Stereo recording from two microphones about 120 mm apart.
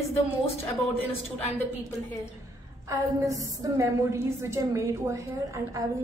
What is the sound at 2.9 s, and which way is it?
A woman's voice, 25° right (ahead or behind).